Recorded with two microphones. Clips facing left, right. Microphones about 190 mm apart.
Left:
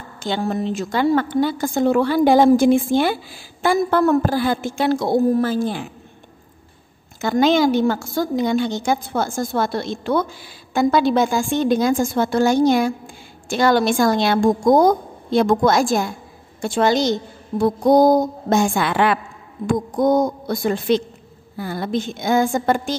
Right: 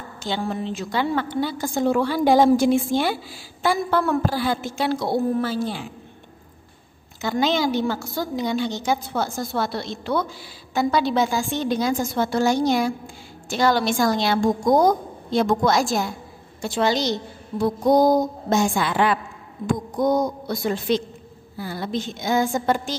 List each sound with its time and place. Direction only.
0.2 s a woman's voice: 50° left (ahead or behind)
7.2 s a woman's voice: 50° left (ahead or behind)
19.6 s a woman's voice: 50° left (ahead or behind)